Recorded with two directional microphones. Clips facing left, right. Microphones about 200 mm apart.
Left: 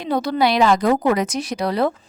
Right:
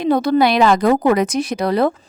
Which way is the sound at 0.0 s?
50° right (ahead or behind).